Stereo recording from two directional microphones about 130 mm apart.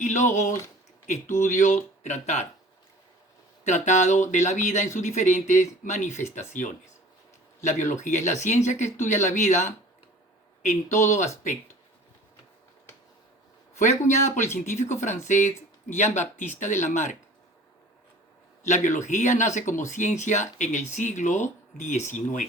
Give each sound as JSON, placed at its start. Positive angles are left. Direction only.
{"t": 0.0, "sound": "speech", "side_deg": 70}
{"t": 1.3, "sound": "speech", "side_deg": 80}
{"t": 3.7, "sound": "speech", "side_deg": 65}
{"t": 14.1, "sound": "speech", "side_deg": 60}
{"t": 18.6, "sound": "speech", "side_deg": 70}